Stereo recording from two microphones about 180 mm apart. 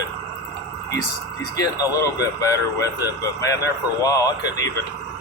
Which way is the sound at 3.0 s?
20° left (ahead or behind).